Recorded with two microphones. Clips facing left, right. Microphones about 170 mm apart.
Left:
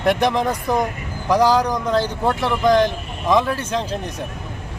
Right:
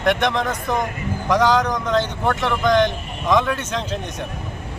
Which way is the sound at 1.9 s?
35° left (ahead or behind).